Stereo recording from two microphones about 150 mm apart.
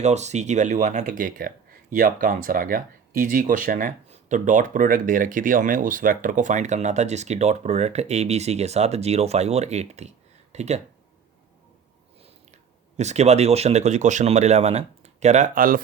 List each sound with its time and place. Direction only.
0.0 s speech: 50° right (ahead or behind)
1.0 s speech: 65° right (ahead or behind); by 10.8 s 45° right (ahead or behind)
13.0 s speech: 50° right (ahead or behind); by 15.8 s 70° right (ahead or behind)